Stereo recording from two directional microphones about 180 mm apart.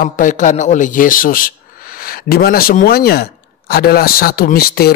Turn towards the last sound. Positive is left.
turn(degrees=60)  # may be behind; listen again after turning